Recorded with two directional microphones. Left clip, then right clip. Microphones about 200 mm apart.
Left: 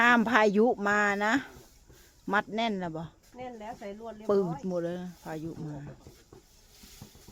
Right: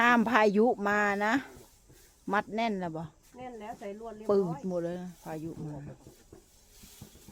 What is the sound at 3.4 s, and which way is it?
Snake, 45° left (ahead or behind).